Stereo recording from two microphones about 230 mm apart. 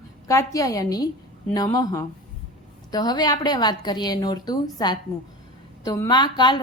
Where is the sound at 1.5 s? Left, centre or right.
Centre.